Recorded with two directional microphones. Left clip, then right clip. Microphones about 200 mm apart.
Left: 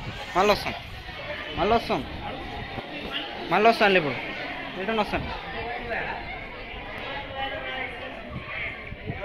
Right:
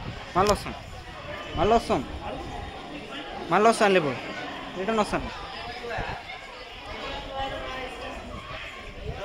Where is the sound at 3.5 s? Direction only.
20° right (ahead or behind).